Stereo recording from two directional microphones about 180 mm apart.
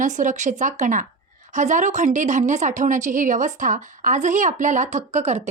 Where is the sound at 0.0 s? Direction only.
45° right (ahead or behind).